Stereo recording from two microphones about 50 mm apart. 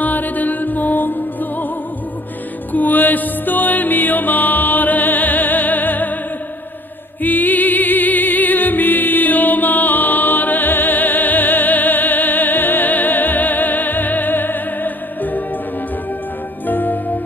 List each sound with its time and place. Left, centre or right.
0.0 s music: left
2.7 s music: left
7.2 s music: left
16.6 s music: left